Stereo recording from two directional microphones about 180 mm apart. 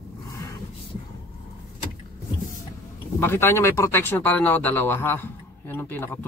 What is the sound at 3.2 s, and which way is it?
Speech, 10° left (ahead or behind).